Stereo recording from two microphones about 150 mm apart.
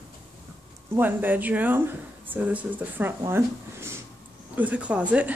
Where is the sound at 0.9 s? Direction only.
15° right (ahead or behind).